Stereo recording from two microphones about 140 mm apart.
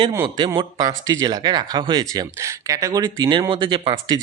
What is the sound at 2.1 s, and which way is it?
Speech, 20° right (ahead or behind).